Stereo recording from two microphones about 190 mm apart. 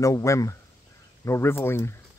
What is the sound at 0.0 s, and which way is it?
Speech, 15° left (ahead or behind).